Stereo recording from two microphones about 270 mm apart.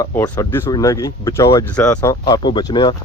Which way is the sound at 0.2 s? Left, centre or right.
Centre.